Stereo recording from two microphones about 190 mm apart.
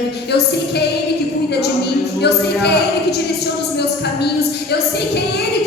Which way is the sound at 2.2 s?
60° left (ahead or behind).